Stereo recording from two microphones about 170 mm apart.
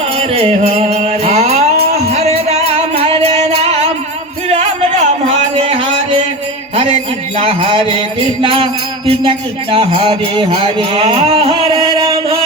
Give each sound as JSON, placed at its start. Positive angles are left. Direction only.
{"t": 0.2, "sound": "music", "side_deg": -40}
{"t": 6.7, "sound": "mantra", "side_deg": -35}
{"t": 8.4, "sound": "music", "side_deg": -30}